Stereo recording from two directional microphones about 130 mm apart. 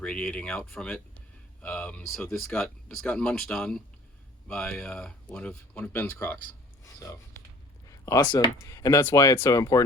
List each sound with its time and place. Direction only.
0.0 s speech: 10° left (ahead or behind)
7.9 s speech: 25° left (ahead or behind)
8.6 s speech: 25° left (ahead or behind)